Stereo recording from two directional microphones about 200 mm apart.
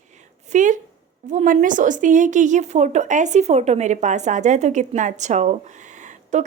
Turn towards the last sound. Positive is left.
turn(degrees=-35)  # may be behind; listen again after turning